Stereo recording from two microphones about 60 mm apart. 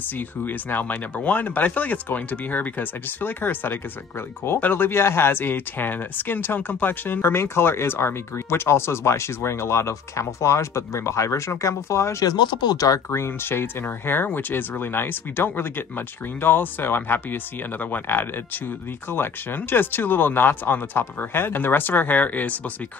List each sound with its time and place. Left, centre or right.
0.5 s speech: left
12.2 s speech: left
13.1 s speech: left